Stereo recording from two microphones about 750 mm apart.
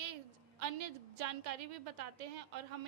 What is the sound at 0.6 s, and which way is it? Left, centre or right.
A woman's voice, right.